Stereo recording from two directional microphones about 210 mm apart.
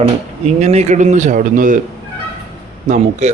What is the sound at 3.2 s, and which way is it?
Speech, 35° right (ahead or behind).